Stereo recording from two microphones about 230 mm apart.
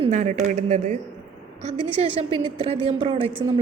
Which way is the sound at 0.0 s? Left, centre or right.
Right.